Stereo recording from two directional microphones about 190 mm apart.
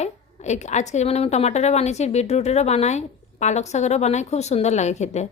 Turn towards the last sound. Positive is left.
turn(degrees=35)  # may be behind; listen again after turning